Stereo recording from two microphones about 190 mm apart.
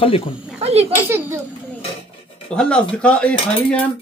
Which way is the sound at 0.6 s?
35° right (ahead or behind).